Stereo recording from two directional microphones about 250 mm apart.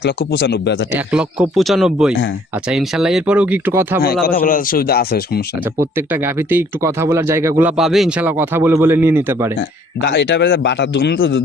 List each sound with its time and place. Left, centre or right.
0.0 s speech: left
0.9 s speech: centre
4.2 s speech: left
5.8 s speech: centre
10.0 s speech: left